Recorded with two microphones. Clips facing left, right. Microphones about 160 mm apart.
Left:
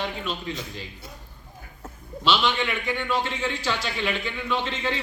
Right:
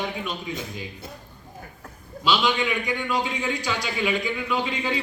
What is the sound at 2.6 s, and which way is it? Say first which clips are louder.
A man's voice: right 1 dB; 15° right (ahead or behind).